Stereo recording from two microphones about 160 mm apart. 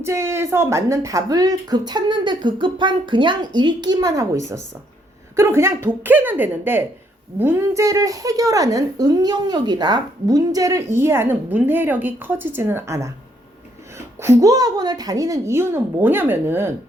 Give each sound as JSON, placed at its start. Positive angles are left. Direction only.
{"t": 0.0, "sound": "speech", "side_deg": -15}
{"t": 5.4, "sound": "a woman's voice", "side_deg": -15}
{"t": 14.2, "sound": "a woman's voice", "side_deg": -20}